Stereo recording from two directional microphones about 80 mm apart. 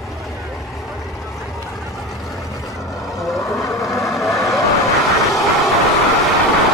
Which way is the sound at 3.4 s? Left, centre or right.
Left.